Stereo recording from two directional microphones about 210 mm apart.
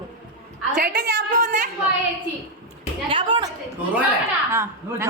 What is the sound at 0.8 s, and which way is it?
Speech, 45° right (ahead or behind).